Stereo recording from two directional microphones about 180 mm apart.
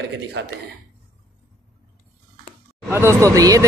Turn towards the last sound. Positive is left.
turn(degrees=-20)  # may be behind; listen again after turning